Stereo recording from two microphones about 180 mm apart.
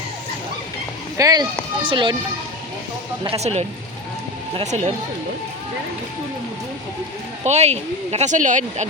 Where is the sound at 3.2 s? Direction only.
35° right (ahead or behind).